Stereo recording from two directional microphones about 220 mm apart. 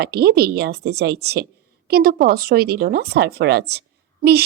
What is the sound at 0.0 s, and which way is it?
Speech, 45° right (ahead or behind).